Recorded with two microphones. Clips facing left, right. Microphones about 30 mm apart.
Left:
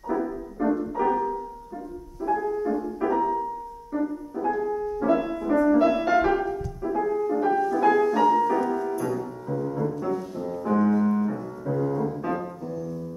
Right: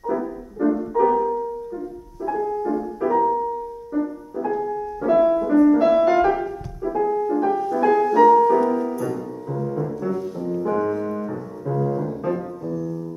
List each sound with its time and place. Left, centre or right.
0.0 s music: centre
8.8 s music: centre